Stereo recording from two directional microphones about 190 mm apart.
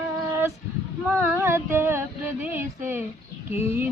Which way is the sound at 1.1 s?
15° right (ahead or behind).